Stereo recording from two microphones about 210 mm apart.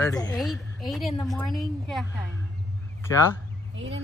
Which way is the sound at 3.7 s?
60° right (ahead or behind).